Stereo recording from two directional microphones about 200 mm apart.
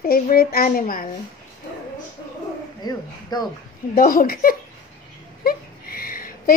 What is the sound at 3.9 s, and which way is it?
Speech, 45° left (ahead or behind).